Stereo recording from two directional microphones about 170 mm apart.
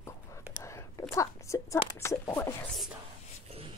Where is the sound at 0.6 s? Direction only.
15° left (ahead or behind).